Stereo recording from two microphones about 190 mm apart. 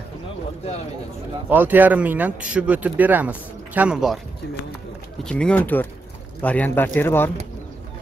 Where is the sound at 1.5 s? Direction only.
10° right (ahead or behind).